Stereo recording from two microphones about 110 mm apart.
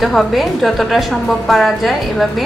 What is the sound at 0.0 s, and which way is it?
A woman's voice, centre (ahead or behind).